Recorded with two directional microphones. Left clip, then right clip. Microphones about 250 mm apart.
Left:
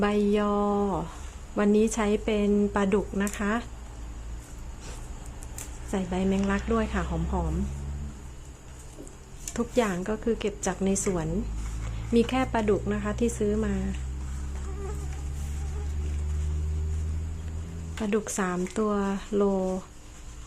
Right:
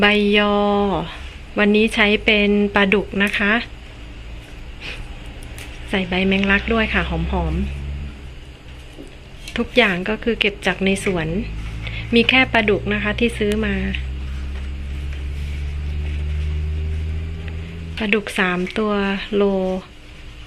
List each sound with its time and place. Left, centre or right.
0.0 s a woman's voice: centre
5.9 s a woman's voice: centre
9.5 s a woman's voice: centre
18.0 s a woman's voice: centre